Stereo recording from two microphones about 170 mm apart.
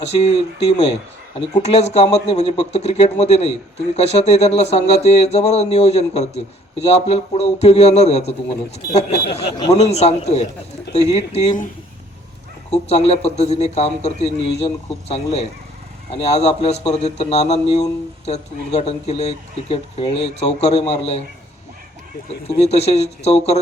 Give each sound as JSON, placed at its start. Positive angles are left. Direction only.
{"t": 0.0, "sound": "speech", "side_deg": 40}
{"t": 1.4, "sound": "speech", "side_deg": 40}
{"t": 9.1, "sound": "speech", "side_deg": 70}
{"t": 9.7, "sound": "speech", "side_deg": 40}
{"t": 12.7, "sound": "speech", "side_deg": 40}
{"t": 22.4, "sound": "speech", "side_deg": 40}